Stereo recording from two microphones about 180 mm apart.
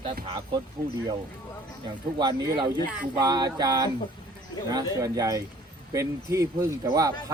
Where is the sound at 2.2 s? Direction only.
25° right (ahead or behind).